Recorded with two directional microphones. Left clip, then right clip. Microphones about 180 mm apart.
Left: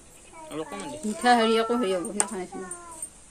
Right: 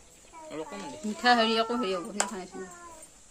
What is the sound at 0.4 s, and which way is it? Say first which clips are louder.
Speech: left 4 dB; centre (ahead or behind).